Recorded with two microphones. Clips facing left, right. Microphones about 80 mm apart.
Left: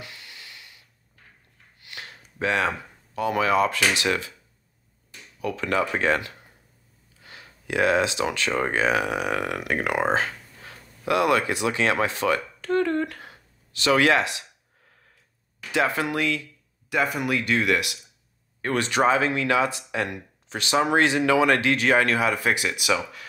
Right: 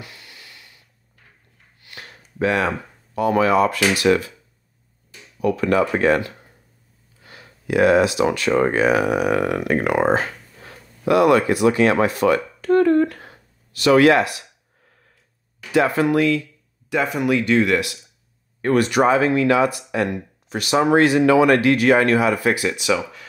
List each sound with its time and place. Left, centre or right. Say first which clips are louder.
0.0 s a sound: right 1 dB; right
2.0 s a sound: right 7 dB; right
2.6 s speech: right 3 dB; centre
3.2 s speech: right 5 dB; right
5.4 s speech: right 7 dB; right
15.7 s speech: right 7 dB; right
16.9 s speech: right 5 dB; centre
18.6 s speech: right 6 dB; centre
22.8 s speech: right 4 dB; centre